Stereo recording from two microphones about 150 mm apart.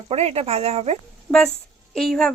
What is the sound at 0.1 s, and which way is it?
Speech, 45° right (ahead or behind).